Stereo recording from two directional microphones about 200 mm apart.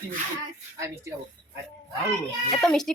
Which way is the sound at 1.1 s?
15° right (ahead or behind).